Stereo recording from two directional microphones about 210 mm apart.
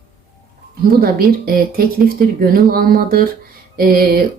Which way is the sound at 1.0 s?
45° right (ahead or behind).